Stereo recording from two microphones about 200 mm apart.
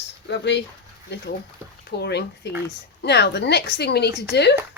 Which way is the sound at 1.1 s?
60° left (ahead or behind).